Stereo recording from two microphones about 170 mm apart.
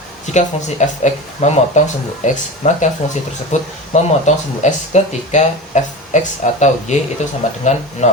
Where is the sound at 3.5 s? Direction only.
45° left (ahead or behind).